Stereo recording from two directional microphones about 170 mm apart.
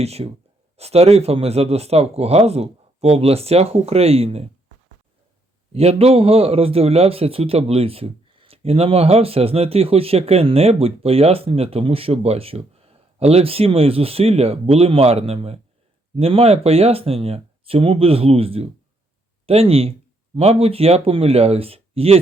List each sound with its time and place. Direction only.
0.0 s a man's voice: 40° right (ahead or behind)
5.7 s a man's voice: 35° right (ahead or behind)